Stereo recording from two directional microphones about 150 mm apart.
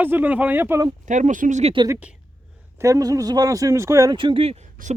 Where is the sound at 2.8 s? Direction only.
20° right (ahead or behind).